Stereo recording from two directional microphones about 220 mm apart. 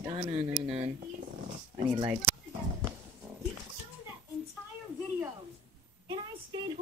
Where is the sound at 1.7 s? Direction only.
15° right (ahead or behind).